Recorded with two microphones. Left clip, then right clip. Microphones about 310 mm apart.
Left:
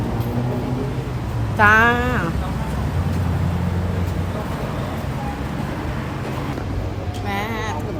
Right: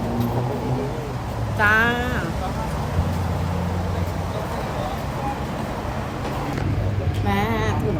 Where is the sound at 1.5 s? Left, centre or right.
Centre.